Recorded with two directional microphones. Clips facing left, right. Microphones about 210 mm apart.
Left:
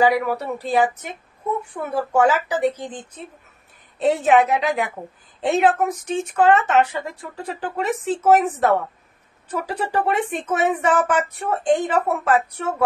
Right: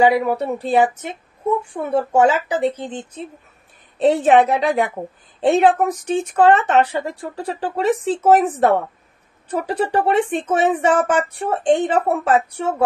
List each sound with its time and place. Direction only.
0.0 s speech: 25° right (ahead or behind)
4.0 s speech: 30° right (ahead or behind)